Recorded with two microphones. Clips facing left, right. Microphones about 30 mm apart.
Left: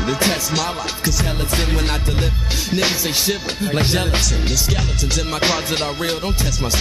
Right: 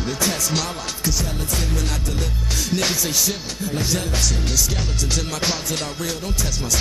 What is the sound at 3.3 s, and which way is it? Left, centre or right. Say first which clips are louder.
Speech: left 5 dB; left.